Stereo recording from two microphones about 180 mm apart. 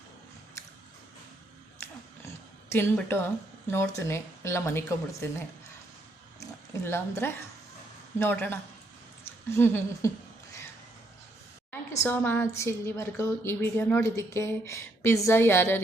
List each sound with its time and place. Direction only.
1.8 s oink: 15° left (ahead or behind)
3.7 s a woman's voice: 15° left (ahead or behind)
6.4 s a woman's voice: 15° left (ahead or behind)
11.7 s a woman's voice: 10° left (ahead or behind)